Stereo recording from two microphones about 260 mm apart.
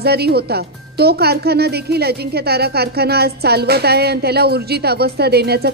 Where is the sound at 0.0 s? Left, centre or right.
Right.